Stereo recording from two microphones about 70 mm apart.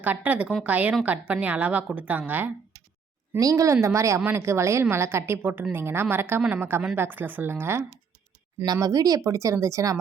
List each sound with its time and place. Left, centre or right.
0.0 s a woman's voice: right
3.4 s a woman's voice: right
8.6 s speech: right